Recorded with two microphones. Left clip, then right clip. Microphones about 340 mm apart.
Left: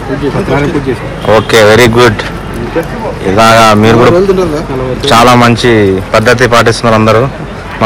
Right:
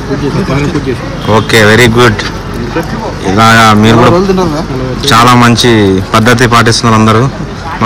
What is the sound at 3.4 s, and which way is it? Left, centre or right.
Speech, centre.